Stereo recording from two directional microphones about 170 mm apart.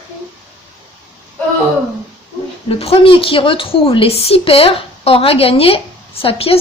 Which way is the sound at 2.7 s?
35° left (ahead or behind).